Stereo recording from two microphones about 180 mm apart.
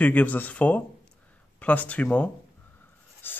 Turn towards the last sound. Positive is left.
turn(degrees=10)  # may be behind; listen again after turning